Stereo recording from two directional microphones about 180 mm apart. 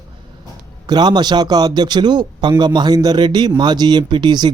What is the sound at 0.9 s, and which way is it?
A man's voice, 20° right (ahead or behind).